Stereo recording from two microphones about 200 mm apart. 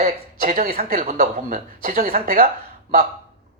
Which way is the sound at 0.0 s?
40° right (ahead or behind).